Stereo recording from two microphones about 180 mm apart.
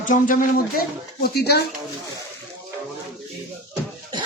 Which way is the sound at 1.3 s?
65° left (ahead or behind).